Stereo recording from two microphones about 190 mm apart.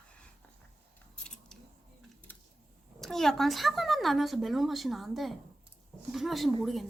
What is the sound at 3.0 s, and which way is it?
Speech, centre (ahead or behind).